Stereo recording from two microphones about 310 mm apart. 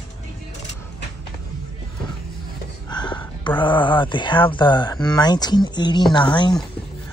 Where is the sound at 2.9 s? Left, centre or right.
Centre.